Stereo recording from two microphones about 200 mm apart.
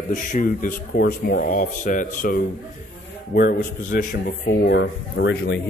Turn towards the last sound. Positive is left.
turn(degrees=60)  # may be behind; listen again after turning